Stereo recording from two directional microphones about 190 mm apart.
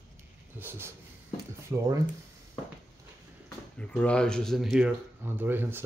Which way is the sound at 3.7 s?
5° left (ahead or behind).